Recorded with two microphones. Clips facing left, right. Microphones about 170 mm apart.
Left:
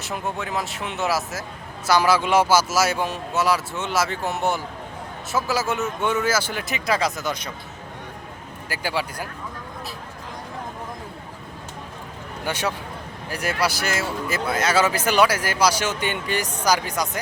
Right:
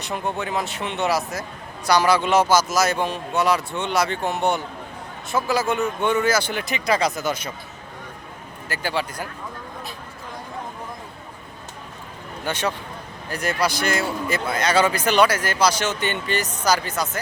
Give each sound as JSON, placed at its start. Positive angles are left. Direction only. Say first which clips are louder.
{"t": 0.0, "sound": "speech", "louder": "right 2 dB", "side_deg": 0}
{"t": 8.7, "sound": "speech", "louder": "right 1 dB", "side_deg": 10}
{"t": 12.5, "sound": "speech", "louder": "right 1 dB", "side_deg": 10}